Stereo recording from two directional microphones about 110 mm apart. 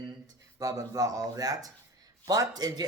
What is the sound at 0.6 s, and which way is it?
Speech, 30° right (ahead or behind).